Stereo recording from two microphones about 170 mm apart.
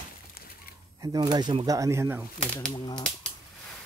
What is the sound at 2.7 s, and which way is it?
Speech, 25° left (ahead or behind).